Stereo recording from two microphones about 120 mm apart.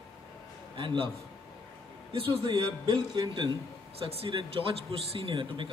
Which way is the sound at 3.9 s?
55° right (ahead or behind).